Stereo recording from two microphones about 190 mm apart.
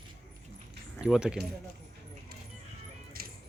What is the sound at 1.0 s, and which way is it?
Speech, 5° right (ahead or behind).